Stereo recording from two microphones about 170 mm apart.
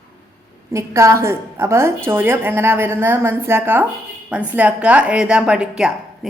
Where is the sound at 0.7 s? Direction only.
15° right (ahead or behind).